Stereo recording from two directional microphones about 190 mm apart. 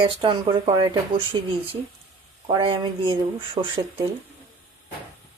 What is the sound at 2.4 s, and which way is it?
Speech, 25° right (ahead or behind).